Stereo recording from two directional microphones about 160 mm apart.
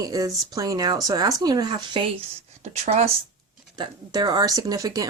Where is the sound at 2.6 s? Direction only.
45° right (ahead or behind).